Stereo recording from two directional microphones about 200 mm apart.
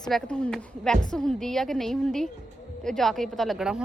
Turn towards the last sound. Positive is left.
turn(degrees=-5)  # may be behind; listen again after turning